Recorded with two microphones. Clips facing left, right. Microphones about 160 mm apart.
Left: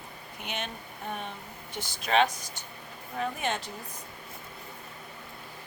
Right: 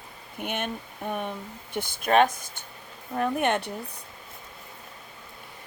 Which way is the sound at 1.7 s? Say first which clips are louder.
Right 5 dB; 55° right (ahead or behind).